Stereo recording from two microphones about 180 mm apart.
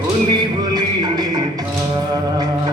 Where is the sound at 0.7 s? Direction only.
20° right (ahead or behind).